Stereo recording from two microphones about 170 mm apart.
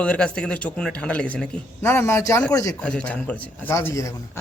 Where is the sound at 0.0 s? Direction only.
5° left (ahead or behind).